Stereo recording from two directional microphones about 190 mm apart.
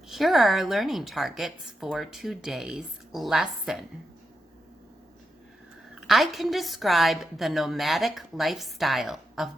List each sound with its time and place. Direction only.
0.1 s a woman's voice: centre (ahead or behind)
6.0 s a woman's voice: centre (ahead or behind)